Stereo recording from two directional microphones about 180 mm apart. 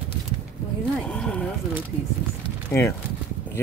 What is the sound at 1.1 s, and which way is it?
Speech, 5° left (ahead or behind).